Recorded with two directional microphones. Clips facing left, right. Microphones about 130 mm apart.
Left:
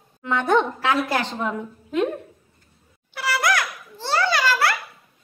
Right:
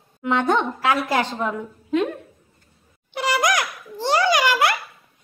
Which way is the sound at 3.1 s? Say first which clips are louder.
Right 2 dB; 20° right (ahead or behind).